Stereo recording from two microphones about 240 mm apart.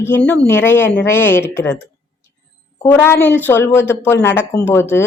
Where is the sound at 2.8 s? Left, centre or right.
Centre.